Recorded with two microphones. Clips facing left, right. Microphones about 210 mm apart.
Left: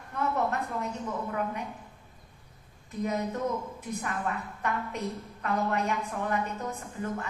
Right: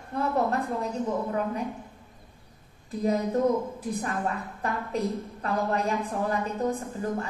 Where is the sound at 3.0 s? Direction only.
35° right (ahead or behind).